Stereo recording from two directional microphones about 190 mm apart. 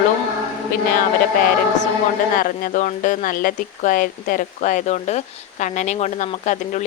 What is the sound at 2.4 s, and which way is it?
Speech, 45° left (ahead or behind).